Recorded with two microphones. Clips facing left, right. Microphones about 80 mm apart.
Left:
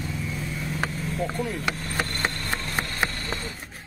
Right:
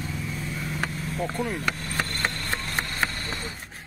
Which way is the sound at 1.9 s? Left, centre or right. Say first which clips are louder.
Left 1 dB; centre.